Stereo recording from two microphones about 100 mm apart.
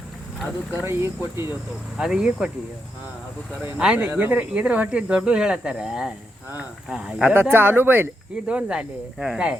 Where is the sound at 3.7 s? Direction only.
10° right (ahead or behind).